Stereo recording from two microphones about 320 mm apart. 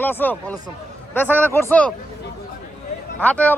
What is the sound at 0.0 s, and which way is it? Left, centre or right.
Speech, centre.